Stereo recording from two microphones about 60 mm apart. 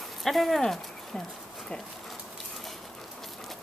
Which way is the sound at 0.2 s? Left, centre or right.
Centre.